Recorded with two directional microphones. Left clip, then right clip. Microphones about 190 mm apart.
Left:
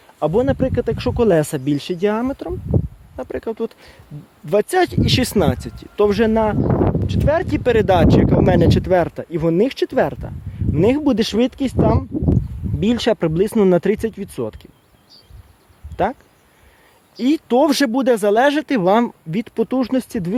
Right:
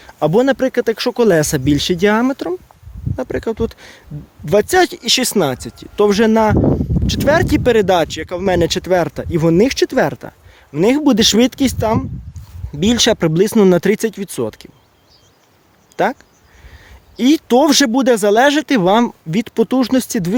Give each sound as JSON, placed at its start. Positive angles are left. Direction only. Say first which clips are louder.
{"t": 0.2, "sound": "speech", "louder": "right 4 dB", "side_deg": -25}
{"t": 3.2, "sound": "speech", "louder": "right 4 dB", "side_deg": -10}
{"t": 16.0, "sound": "speech", "louder": "right 3 dB", "side_deg": -10}
{"t": 17.2, "sound": "speech", "louder": "right 4 dB", "side_deg": -15}